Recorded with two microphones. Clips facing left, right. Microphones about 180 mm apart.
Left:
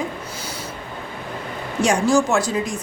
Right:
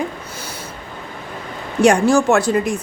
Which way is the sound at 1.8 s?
60° right (ahead or behind).